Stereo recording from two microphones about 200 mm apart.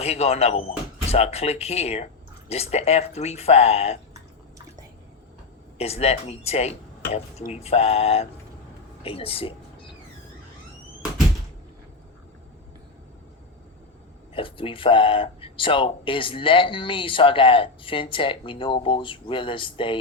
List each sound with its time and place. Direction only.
0.0 s speech: 30° left (ahead or behind)
4.1 s drip: 15° right (ahead or behind)
5.7 s speech: 30° left (ahead or behind)
14.3 s speech: 25° left (ahead or behind)